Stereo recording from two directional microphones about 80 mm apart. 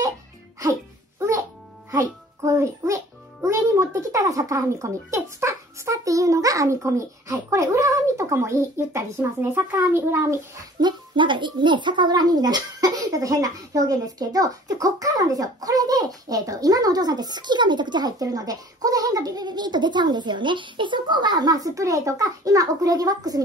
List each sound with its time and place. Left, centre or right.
1.9 s a child's voice: right
9.2 s speech: right
9.9 s a child's voice: right
10.8 s speech: right